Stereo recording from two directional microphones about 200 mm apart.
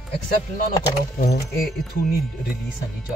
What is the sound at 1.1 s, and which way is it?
Speech, 50° left (ahead or behind).